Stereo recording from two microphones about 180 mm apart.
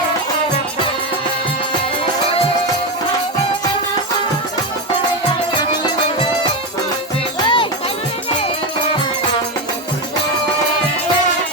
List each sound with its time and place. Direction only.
7.4 s music: 30° left (ahead or behind)